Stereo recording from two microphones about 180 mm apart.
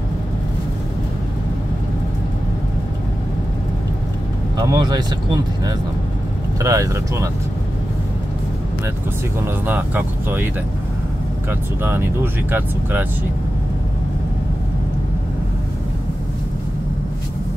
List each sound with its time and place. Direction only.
4.6 s speech: 25° right (ahead or behind)
6.6 s speech: 15° right (ahead or behind)
9.7 s speech: 10° right (ahead or behind)
12.4 s speech: 10° right (ahead or behind)